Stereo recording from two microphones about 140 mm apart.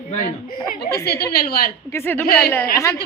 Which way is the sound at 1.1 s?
90° left.